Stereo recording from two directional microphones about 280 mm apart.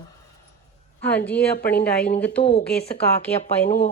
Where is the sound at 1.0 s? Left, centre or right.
Centre.